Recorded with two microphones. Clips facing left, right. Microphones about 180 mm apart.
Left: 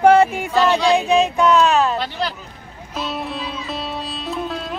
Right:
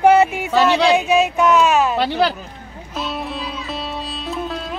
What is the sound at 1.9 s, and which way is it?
Speech, 70° right (ahead or behind).